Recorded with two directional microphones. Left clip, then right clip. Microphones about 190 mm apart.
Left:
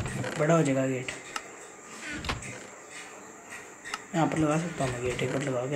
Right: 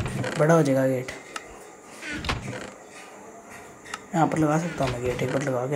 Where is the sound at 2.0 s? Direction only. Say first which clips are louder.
Right 4 dB; centre (ahead or behind).